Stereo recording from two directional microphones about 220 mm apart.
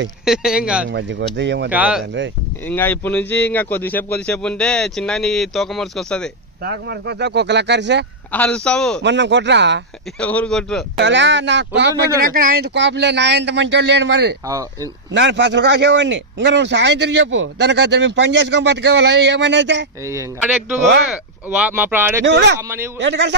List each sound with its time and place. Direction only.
0.2 s a man's voice: 5° right (ahead or behind)
0.9 s a man's voice: 50° right (ahead or behind)
1.7 s a man's voice: 5° right (ahead or behind)
2.7 s a man's voice: 10° left (ahead or behind)
6.6 s a man's voice: 50° right (ahead or behind)
8.3 s a man's voice: 5° left (ahead or behind)
9.0 s a man's voice: 55° right (ahead or behind)
10.2 s a man's voice: 5° left (ahead or behind)
11.0 s a man's voice: 55° right (ahead or behind)
20.1 s speech: 15° right (ahead or behind)
22.2 s a man's voice: 50° right (ahead or behind)